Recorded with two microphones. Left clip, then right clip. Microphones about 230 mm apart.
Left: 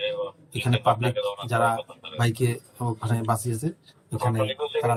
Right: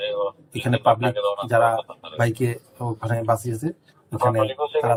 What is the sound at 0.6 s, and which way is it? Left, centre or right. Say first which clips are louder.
A man's voice: right 4 dB; centre.